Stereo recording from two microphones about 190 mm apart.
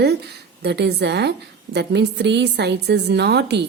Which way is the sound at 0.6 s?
60° right (ahead or behind).